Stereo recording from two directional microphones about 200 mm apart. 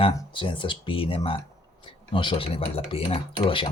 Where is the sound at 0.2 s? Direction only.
25° left (ahead or behind).